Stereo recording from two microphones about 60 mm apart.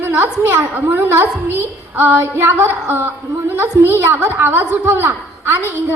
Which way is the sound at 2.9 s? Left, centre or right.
Right.